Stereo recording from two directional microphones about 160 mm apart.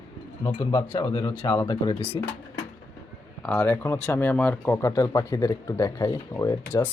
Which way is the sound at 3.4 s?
10° left (ahead or behind).